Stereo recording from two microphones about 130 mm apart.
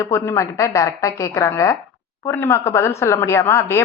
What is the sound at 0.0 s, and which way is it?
A woman's voice, 20° left (ahead or behind).